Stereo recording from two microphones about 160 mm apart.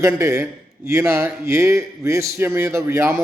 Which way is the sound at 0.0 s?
20° right (ahead or behind).